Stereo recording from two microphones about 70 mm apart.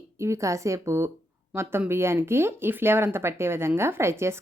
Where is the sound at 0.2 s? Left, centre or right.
Right.